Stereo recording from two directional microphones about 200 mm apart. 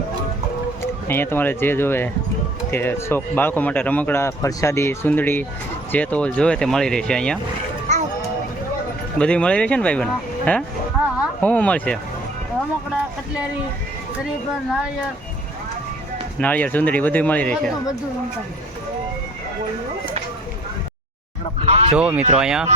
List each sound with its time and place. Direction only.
0.8 s speech: 10° left (ahead or behind)
7.9 s music: 35° right (ahead or behind)
9.1 s speech: 5° left (ahead or behind)
16.4 s speech: 10° left (ahead or behind)
21.6 s speech: 30° right (ahead or behind)
21.9 s speech: 5° right (ahead or behind)